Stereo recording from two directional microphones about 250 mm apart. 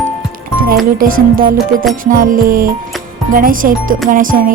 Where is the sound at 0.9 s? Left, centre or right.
Right.